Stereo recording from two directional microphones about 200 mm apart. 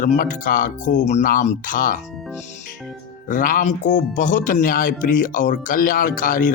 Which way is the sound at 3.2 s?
40° left (ahead or behind).